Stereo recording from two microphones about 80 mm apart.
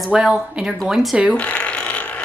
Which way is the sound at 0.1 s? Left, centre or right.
Centre.